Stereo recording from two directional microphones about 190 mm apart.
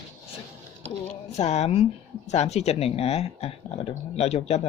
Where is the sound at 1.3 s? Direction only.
35° left (ahead or behind).